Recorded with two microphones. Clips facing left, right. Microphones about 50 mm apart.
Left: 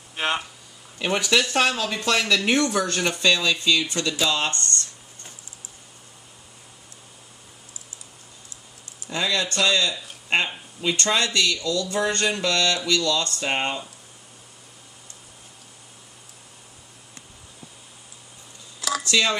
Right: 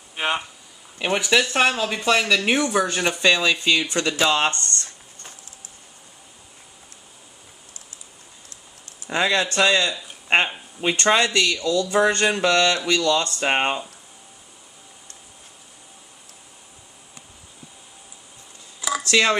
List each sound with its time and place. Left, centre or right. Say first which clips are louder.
0.1 s speech: right 1 dB; centre; by 4.6 s right
9.1 s speech: right 4 dB; right
18.8 s a sound: right 1 dB; centre
19.0 s speech: right 4 dB; right